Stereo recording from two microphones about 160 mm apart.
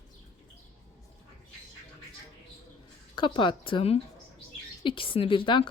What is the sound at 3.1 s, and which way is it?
A woman's voice, 30° left (ahead or behind).